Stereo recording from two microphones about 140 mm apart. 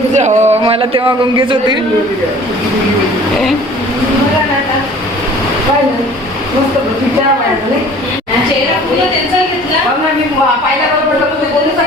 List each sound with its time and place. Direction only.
0.1 s speech: 55° right (ahead or behind)
0.6 s a man's voice: 40° right (ahead or behind)